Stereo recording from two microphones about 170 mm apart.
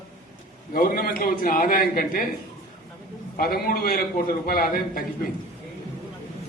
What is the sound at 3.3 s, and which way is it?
A man's voice, 60° left (ahead or behind).